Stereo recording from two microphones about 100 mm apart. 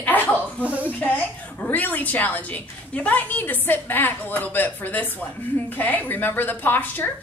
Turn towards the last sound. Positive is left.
turn(degrees=20)  # may be behind; listen again after turning